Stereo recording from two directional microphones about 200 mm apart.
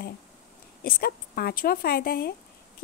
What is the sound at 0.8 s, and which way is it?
A woman's voice, 45° left (ahead or behind).